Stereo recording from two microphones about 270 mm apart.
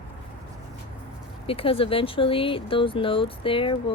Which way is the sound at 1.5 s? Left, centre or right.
Centre.